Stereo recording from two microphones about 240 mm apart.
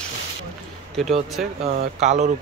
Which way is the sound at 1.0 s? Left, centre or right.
Centre.